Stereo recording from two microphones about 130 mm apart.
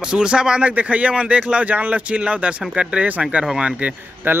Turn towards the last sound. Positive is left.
turn(degrees=-10)  # may be behind; listen again after turning